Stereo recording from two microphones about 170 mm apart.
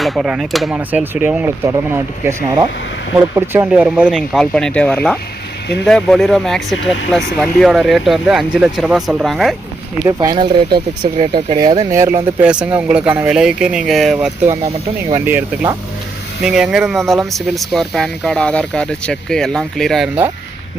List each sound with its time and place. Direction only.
0.0 s speech: centre (ahead or behind)
10.0 s speech: 20° right (ahead or behind); by 14.3 s centre (ahead or behind)
14.4 s speech: 20° right (ahead or behind); by 20.1 s centre (ahead or behind)